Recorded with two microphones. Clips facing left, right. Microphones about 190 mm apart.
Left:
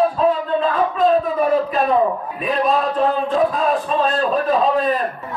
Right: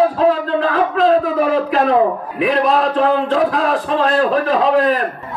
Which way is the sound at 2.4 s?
90° right.